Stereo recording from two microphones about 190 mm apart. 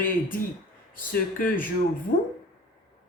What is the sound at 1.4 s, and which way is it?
Speech, 45° left (ahead or behind).